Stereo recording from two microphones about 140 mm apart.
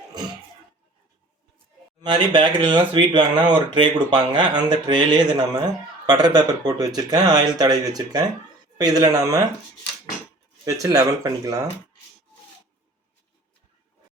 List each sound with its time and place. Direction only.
2.0 s speech: 35° right (ahead or behind)
10.7 s speech: 25° right (ahead or behind)